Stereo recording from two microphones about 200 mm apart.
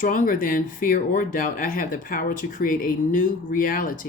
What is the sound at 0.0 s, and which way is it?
Speech, 40° left (ahead or behind).